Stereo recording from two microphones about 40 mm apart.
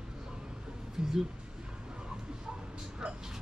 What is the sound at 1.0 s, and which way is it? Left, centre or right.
Music, centre.